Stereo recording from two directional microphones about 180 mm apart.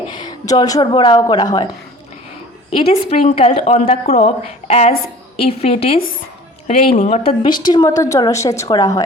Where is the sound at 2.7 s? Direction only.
35° left (ahead or behind).